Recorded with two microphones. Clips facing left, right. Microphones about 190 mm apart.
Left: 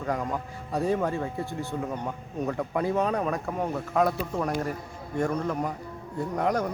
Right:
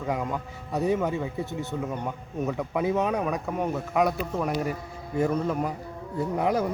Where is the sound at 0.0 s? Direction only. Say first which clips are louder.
Even; 5° right (ahead or behind).